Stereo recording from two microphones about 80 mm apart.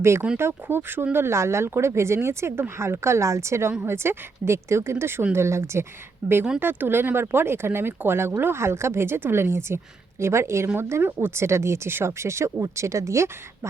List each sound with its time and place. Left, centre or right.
0.3 s speech: right